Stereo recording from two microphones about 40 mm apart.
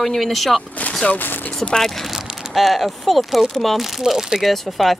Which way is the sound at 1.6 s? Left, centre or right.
Centre.